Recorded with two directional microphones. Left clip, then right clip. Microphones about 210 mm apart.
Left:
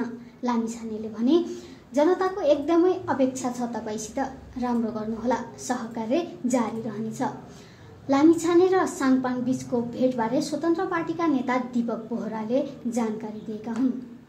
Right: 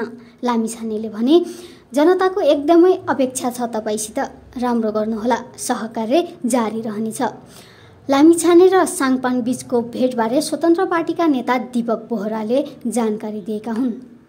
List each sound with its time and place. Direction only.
0.0 s a woman's voice: 55° right (ahead or behind)